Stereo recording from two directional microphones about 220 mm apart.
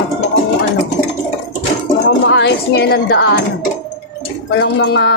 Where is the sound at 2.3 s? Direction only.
55° left (ahead or behind).